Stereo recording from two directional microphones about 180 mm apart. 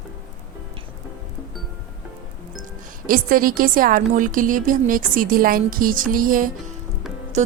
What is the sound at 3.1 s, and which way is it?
A woman's voice, 50° right (ahead or behind).